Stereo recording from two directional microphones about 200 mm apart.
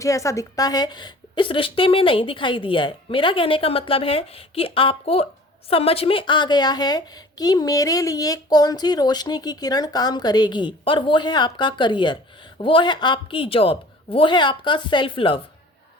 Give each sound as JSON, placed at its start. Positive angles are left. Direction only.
{"t": 0.0, "sound": "a woman's voice", "side_deg": 15}